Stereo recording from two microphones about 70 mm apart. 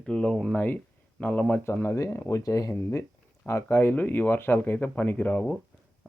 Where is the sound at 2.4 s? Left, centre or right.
Left.